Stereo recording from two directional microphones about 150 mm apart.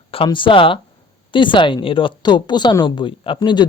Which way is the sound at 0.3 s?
35° left (ahead or behind).